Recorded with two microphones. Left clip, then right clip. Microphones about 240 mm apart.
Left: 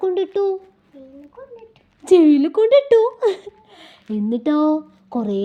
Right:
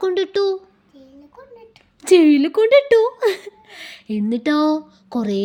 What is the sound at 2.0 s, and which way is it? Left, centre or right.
Speech, right.